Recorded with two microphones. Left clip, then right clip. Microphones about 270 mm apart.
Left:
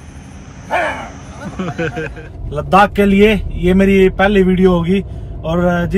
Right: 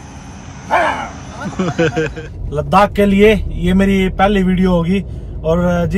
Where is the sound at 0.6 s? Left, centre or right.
Centre.